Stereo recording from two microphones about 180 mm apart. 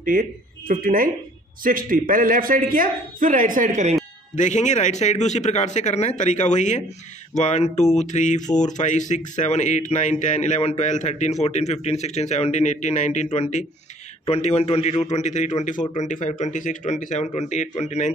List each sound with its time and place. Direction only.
0.0 s speech: 50° right (ahead or behind)
4.4 s speech: 40° left (ahead or behind)